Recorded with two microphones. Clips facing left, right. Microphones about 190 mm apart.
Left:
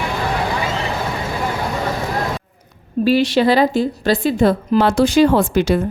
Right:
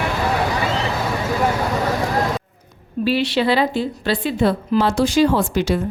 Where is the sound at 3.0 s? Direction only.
45° left (ahead or behind).